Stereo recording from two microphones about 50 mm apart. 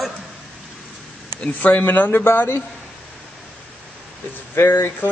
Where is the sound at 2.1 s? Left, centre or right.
Left.